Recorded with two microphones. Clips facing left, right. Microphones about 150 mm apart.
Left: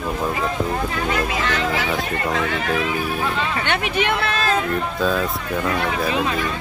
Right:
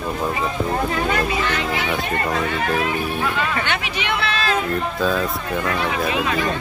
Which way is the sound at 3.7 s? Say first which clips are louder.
Left 3 dB; 50° left (ahead or behind).